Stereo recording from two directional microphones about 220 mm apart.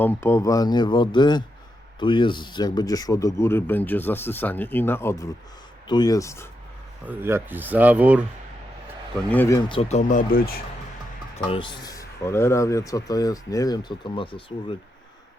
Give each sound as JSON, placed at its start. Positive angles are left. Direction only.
{"t": 0.0, "sound": "speech", "side_deg": 10}
{"t": 7.0, "sound": "speech", "side_deg": -10}
{"t": 9.3, "sound": "speech", "side_deg": 10}
{"t": 9.6, "sound": "speech", "side_deg": 20}
{"t": 10.0, "sound": "speech", "side_deg": 35}
{"t": 11.4, "sound": "speech", "side_deg": 20}